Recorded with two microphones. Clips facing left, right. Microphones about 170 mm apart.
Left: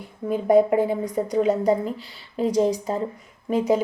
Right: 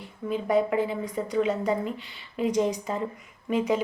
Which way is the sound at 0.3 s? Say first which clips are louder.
Left 7 dB; 45° left (ahead or behind).